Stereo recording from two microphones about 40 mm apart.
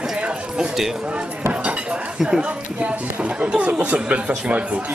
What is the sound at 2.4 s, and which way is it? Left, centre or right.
Speech, right.